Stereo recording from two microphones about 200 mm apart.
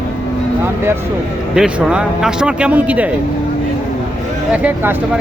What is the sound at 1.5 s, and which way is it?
A man's voice, 5° right (ahead or behind).